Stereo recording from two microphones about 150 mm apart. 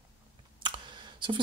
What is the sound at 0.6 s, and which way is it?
Computer keyboard, 30° right (ahead or behind).